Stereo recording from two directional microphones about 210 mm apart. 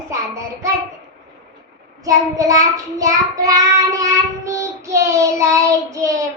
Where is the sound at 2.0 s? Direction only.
15° right (ahead or behind).